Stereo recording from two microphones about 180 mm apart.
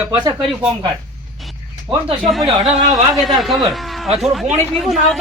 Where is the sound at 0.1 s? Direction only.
25° right (ahead or behind).